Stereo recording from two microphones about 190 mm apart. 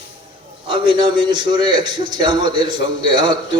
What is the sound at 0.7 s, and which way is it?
A man's voice, 25° right (ahead or behind).